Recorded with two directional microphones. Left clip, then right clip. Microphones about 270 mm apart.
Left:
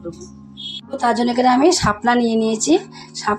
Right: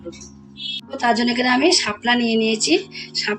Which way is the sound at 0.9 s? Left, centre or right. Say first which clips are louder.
Left 2 dB; centre.